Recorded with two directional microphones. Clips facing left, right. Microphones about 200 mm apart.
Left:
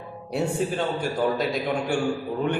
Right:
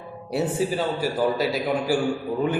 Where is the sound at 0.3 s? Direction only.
Centre (ahead or behind).